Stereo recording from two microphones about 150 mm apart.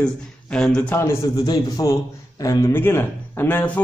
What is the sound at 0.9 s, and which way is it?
A man's voice, 20° left (ahead or behind).